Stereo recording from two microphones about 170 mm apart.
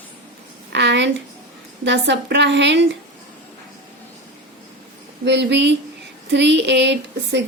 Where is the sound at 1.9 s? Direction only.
90° right.